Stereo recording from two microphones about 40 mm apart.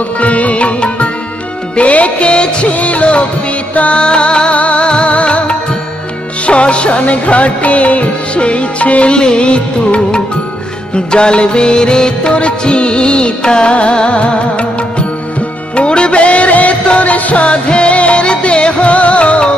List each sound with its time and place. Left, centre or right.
0.2 s music: left